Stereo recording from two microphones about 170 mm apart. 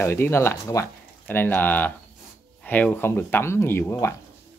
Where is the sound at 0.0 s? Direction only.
15° left (ahead or behind).